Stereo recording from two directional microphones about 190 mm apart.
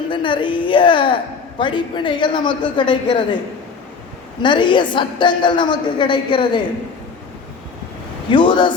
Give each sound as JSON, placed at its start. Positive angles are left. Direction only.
{"t": 0.1, "sound": "a woman's voice", "side_deg": 25}
{"t": 4.4, "sound": "a woman's voice", "side_deg": 25}
{"t": 8.3, "sound": "a woman's voice", "side_deg": 25}